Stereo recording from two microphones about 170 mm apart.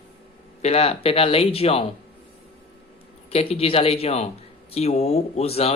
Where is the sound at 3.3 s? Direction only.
35° left (ahead or behind).